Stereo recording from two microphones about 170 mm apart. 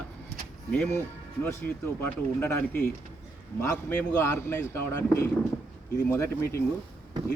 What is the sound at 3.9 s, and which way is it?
Speech, 15° left (ahead or behind).